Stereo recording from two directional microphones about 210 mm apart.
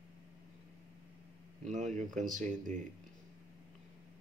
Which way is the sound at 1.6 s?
35° right (ahead or behind).